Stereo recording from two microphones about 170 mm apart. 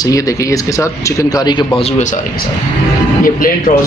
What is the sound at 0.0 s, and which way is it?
Speech, 20° left (ahead or behind).